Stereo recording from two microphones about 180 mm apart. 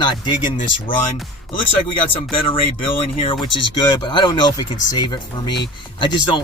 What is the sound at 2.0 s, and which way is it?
Speech, 30° left (ahead or behind).